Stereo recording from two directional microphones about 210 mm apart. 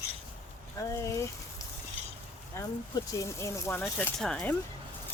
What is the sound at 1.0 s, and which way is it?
Speech, 15° left (ahead or behind).